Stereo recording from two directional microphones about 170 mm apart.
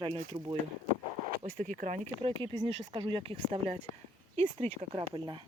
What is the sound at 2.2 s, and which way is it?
Speech, 30° right (ahead or behind).